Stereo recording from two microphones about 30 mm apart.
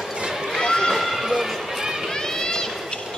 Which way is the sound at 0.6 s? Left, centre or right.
Centre.